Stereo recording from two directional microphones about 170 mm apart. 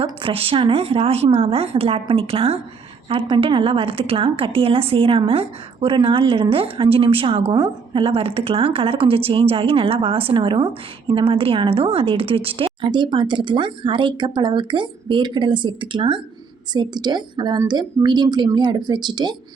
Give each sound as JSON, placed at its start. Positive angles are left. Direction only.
{"t": 0.0, "sound": "a woman's voice", "side_deg": -30}